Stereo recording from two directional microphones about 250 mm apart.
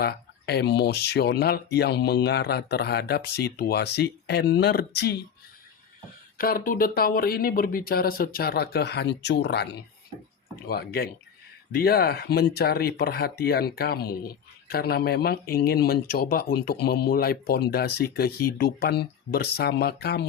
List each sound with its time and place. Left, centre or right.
0.0 s speech: left
6.3 s speech: left
10.7 s speech: left